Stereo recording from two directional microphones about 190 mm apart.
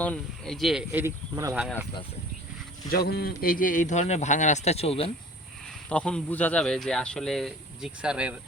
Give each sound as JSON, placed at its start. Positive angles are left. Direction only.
{"t": 0.0, "sound": "speech", "side_deg": 5}
{"t": 1.0, "sound": "speech", "side_deg": -15}
{"t": 2.9, "sound": "a man's voice", "side_deg": 55}
{"t": 5.9, "sound": "speech", "side_deg": 5}